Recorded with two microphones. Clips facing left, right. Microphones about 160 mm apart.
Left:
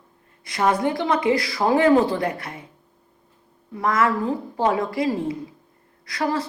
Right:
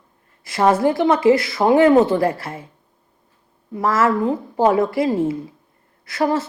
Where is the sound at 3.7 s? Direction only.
30° right (ahead or behind).